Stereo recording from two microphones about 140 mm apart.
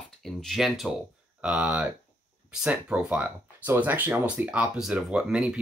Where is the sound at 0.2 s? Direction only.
Centre (ahead or behind).